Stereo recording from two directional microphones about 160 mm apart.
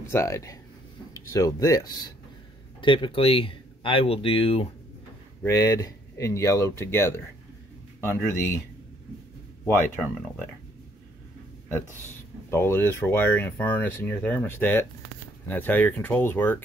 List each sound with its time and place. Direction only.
0.0 s speech: 20° left (ahead or behind); by 4.6 s 35° left (ahead or behind)
5.4 s speech: 20° left (ahead or behind)
12.4 s speech: 15° left (ahead or behind)